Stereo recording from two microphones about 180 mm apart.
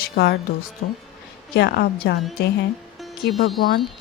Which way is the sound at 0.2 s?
65° left (ahead or behind).